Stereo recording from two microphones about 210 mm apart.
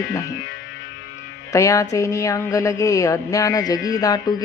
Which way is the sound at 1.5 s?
15° left (ahead or behind).